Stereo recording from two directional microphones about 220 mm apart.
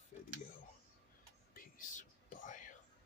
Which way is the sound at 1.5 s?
35° left (ahead or behind).